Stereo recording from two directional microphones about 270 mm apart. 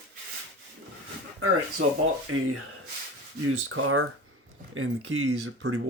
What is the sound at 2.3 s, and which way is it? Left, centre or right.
Speech, right.